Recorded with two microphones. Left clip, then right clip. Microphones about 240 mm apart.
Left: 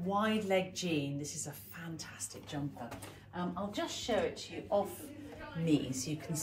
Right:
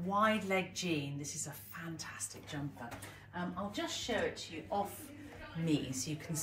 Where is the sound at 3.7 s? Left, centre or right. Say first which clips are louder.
Left 3 dB; centre.